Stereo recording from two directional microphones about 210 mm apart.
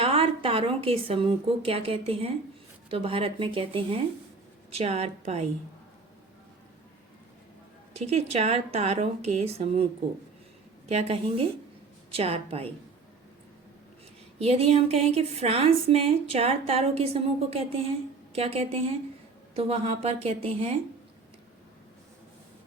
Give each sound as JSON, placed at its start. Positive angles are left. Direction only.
{"t": 0.0, "sound": "a woman's voice", "side_deg": -25}
{"t": 7.9, "sound": "a woman's voice", "side_deg": -30}
{"t": 10.8, "sound": "a woman's voice", "side_deg": -30}
{"t": 14.3, "sound": "a woman's voice", "side_deg": -30}